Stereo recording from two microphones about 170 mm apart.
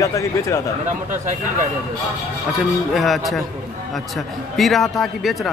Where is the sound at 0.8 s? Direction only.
50° right (ahead or behind).